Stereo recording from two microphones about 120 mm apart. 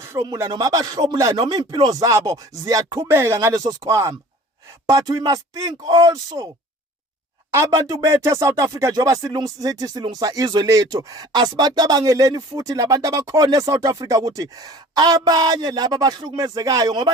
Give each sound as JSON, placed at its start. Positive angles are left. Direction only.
{"t": 0.0, "sound": "a sound", "side_deg": -20}
{"t": 0.5, "sound": "speech", "side_deg": -30}
{"t": 3.1, "sound": "speech", "side_deg": -20}
{"t": 7.5, "sound": "speech", "side_deg": -25}